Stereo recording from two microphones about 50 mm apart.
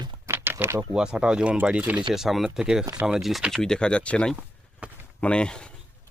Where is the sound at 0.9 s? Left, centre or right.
Centre.